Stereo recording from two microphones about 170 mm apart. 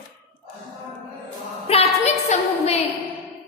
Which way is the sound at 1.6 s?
35° left (ahead or behind).